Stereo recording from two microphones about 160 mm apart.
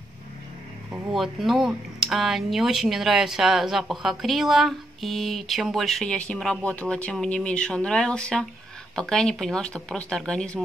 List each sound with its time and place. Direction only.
1.1 s speech: centre (ahead or behind)